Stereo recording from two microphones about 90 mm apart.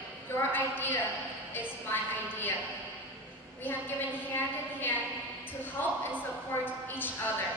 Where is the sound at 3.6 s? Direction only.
20° left (ahead or behind).